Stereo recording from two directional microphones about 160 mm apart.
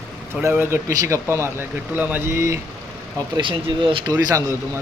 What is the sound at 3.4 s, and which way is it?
Speech, 30° right (ahead or behind).